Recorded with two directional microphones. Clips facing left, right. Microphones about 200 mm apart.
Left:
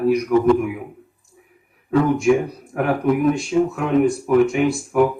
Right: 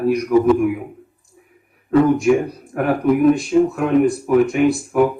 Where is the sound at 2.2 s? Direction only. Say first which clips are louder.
Right 1 dB; centre (ahead or behind).